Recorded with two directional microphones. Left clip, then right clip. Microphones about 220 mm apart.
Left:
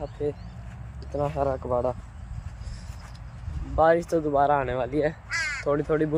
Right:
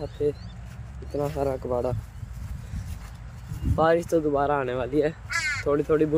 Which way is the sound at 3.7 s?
Centre (ahead or behind).